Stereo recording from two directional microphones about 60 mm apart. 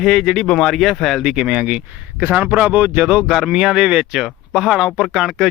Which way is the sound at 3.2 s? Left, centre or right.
Centre.